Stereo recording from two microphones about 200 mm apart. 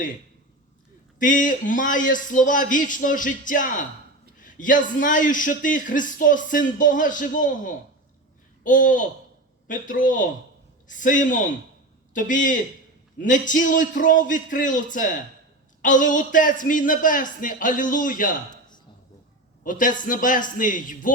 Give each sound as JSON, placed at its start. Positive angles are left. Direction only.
{"t": 1.2, "sound": "a man's voice", "side_deg": 40}
{"t": 19.6, "sound": "a man's voice", "side_deg": 40}